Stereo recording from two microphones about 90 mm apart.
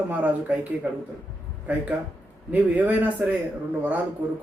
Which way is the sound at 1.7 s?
15° right (ahead or behind).